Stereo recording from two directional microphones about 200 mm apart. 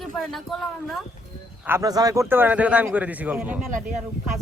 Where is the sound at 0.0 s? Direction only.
Centre (ahead or behind).